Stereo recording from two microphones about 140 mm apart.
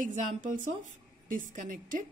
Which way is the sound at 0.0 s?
70° right (ahead or behind).